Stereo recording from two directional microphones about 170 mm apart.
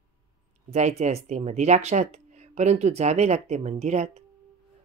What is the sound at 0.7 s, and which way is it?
A man's voice, 40° right (ahead or behind).